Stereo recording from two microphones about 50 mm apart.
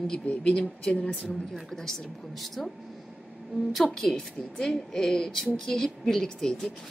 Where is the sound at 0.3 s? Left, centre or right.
Left.